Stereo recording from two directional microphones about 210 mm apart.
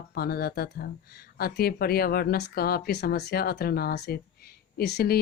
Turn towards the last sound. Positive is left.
turn(degrees=50)  # may be behind; listen again after turning